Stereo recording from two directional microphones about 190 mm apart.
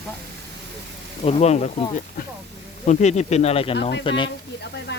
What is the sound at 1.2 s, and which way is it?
Speech, 35° left (ahead or behind).